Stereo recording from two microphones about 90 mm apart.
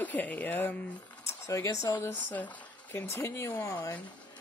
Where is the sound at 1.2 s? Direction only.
35° left (ahead or behind).